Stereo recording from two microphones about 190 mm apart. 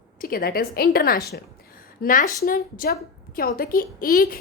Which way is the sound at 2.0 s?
45° left (ahead or behind).